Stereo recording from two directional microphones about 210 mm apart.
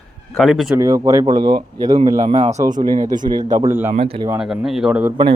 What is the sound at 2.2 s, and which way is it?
Speech, 30° right (ahead or behind).